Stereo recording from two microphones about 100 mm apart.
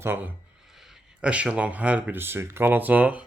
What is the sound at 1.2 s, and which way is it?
Speech, 10° right (ahead or behind).